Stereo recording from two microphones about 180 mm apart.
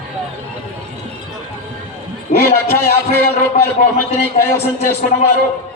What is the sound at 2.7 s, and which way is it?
Speech, 15° left (ahead or behind).